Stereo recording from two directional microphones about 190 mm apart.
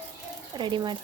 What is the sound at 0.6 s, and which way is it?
Speech, 25° right (ahead or behind).